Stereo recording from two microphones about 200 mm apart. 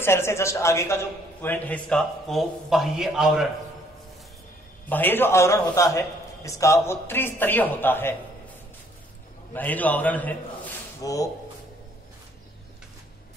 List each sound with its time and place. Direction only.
0.0 s a man's voice: 10° left (ahead or behind)
4.8 s a man's voice: 10° left (ahead or behind)
9.5 s a man's voice: 10° left (ahead or behind)